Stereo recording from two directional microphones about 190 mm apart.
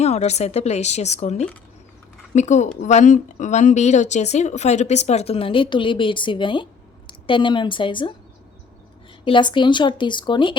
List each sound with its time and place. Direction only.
0.0 s speech: 35° left (ahead or behind)
9.2 s speech: 25° left (ahead or behind)